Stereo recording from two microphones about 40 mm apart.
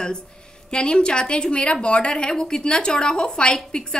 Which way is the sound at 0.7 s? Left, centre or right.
Left.